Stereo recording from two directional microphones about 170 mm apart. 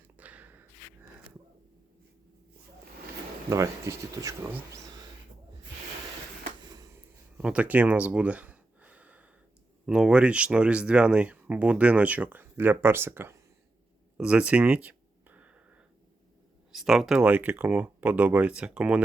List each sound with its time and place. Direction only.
0.2 s gasp: 10° right (ahead or behind)
3.5 s speech: 20° right (ahead or behind)
7.3 s a sound: 10° right (ahead or behind)
9.8 s speech: 5° right (ahead or behind)
14.2 s a sound: 5° right (ahead or behind)
16.7 s speech: centre (ahead or behind)